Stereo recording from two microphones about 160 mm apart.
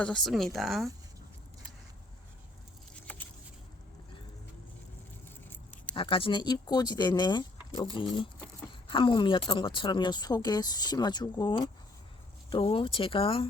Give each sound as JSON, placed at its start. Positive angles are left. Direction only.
{"t": 0.0, "sound": "speech", "side_deg": 5}
{"t": 5.5, "sound": "keys jangling", "side_deg": 10}
{"t": 5.9, "sound": "speech", "side_deg": 35}